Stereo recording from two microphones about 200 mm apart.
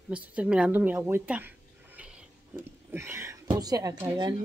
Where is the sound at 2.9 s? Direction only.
10° right (ahead or behind).